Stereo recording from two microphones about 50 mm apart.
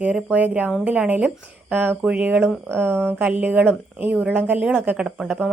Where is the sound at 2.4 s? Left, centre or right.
Right.